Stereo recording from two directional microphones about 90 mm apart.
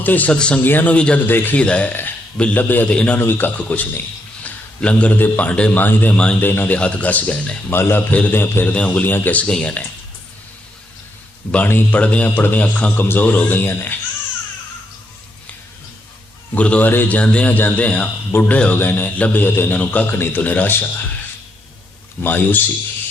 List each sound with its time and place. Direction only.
0.0 s a man's voice: 20° left (ahead or behind)
6.7 s a man's voice: 15° left (ahead or behind)
11.5 s a man's voice: 20° left (ahead or behind)
16.6 s a man's voice: 15° left (ahead or behind)
22.2 s a man's voice: 20° left (ahead or behind)